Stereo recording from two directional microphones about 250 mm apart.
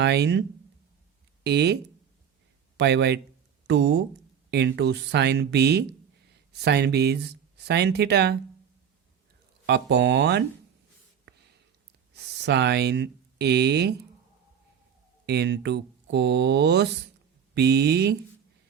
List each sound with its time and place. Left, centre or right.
0.0 s speech: right
1.5 s a man's voice: right
9.6 s speech: right
11.3 s a sound: right
12.1 s speech: right
15.3 s speech: right